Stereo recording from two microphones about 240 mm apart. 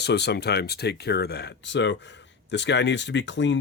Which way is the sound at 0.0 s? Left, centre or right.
Left.